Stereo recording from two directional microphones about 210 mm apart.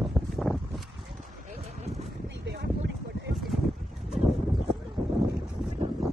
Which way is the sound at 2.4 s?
55° right (ahead or behind).